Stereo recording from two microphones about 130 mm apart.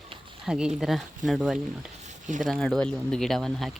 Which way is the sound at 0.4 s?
5° right (ahead or behind).